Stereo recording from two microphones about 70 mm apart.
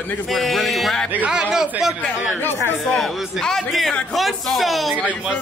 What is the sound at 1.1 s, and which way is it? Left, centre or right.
Speech, centre.